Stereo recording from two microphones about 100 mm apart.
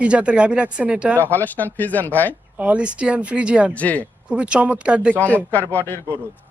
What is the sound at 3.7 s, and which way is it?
Speech, 15° left (ahead or behind).